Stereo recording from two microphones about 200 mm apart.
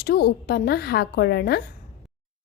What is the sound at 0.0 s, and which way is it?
A woman's voice, 50° left (ahead or behind).